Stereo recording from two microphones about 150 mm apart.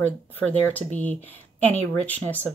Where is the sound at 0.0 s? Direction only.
10° left (ahead or behind).